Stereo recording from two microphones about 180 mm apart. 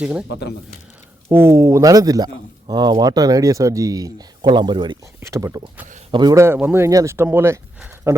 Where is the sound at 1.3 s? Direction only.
15° right (ahead or behind).